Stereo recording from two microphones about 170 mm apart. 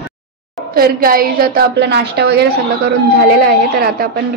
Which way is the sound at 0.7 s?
60° right (ahead or behind).